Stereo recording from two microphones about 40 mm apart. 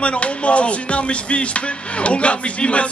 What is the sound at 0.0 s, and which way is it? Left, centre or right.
Music, left.